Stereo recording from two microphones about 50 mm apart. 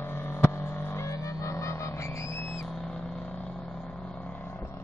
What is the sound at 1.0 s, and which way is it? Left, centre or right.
Music, left.